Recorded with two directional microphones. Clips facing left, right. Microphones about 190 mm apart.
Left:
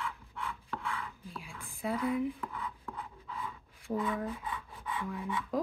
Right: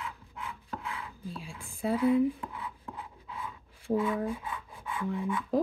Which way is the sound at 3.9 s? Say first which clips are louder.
Right 5 dB; 5° right (ahead or behind).